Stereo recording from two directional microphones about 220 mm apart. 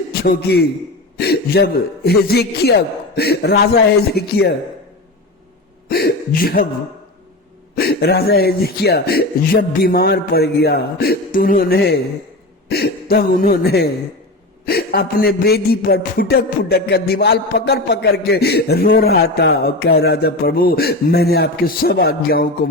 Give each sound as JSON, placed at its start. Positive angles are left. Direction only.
{"t": 0.1, "sound": "a man's voice", "side_deg": 45}
{"t": 1.2, "sound": "music", "side_deg": 45}
{"t": 5.9, "sound": "a sound", "side_deg": 45}
{"t": 7.8, "sound": "music", "side_deg": 45}